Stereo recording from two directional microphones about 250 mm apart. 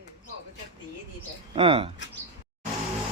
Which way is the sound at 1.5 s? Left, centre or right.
Right.